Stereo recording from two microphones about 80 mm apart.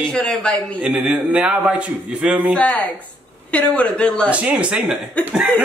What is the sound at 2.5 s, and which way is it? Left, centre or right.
Speech, centre.